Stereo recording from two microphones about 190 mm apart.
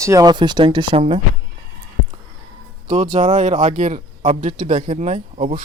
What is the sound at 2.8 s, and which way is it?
Speech, 40° right (ahead or behind).